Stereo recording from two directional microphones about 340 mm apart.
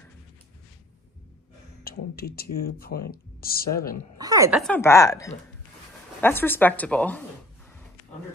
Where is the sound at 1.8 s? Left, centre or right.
Left.